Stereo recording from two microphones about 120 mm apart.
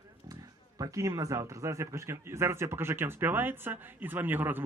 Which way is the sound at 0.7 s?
30° right (ahead or behind).